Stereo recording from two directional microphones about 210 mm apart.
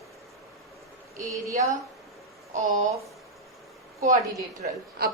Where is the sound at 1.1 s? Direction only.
15° right (ahead or behind).